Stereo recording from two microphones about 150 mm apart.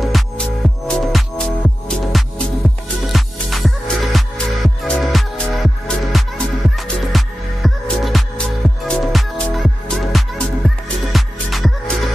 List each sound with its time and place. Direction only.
0.0 s music: centre (ahead or behind)